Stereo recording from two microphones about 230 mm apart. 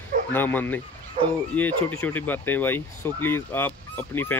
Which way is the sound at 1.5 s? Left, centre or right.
Centre.